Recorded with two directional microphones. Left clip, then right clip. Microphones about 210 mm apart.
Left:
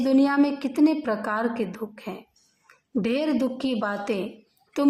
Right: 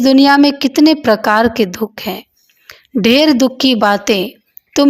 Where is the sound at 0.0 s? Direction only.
35° right (ahead or behind).